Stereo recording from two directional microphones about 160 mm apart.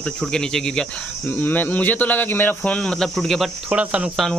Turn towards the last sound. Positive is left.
turn(degrees=-5)  # may be behind; listen again after turning